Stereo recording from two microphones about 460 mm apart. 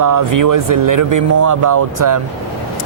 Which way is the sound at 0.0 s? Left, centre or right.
Right.